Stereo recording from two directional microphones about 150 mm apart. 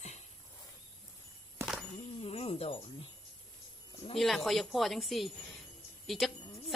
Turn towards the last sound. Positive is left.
turn(degrees=0)  # may be behind; listen again after turning